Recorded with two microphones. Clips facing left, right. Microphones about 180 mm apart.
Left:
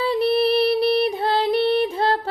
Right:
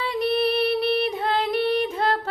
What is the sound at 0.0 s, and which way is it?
Music, 35° left (ahead or behind).